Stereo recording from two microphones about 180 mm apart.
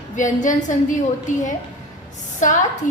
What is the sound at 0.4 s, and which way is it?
Speech, 45° left (ahead or behind).